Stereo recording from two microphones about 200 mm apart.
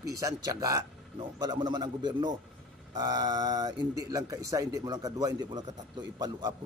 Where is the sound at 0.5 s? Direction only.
15° right (ahead or behind).